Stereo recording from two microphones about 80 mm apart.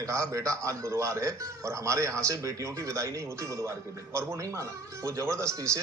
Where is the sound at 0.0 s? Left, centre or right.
Right.